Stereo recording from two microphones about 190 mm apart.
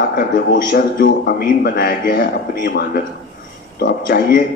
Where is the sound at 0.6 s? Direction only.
50° left (ahead or behind).